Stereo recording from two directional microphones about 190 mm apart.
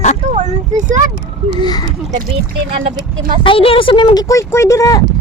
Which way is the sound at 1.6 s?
20° left (ahead or behind).